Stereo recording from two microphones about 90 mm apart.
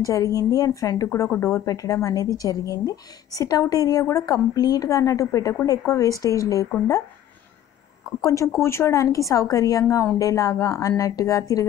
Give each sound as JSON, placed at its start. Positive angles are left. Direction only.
{"t": 0.0, "sound": "speech", "side_deg": 40}
{"t": 8.2, "sound": "speech", "side_deg": 35}